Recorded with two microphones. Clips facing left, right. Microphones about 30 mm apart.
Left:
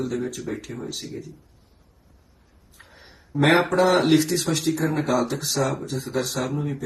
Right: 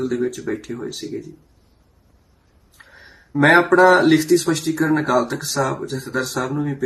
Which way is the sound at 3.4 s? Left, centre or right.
Right.